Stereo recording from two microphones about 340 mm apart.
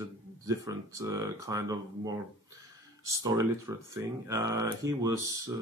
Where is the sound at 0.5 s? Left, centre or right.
Centre.